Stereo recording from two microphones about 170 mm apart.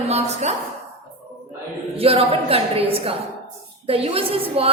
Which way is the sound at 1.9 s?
35° right (ahead or behind).